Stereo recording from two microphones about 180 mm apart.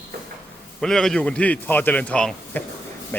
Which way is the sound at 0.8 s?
5° left (ahead or behind).